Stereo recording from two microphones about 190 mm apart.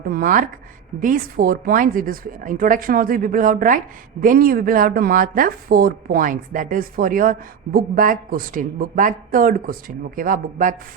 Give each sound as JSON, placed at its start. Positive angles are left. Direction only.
{"t": 0.1, "sound": "speech", "side_deg": -45}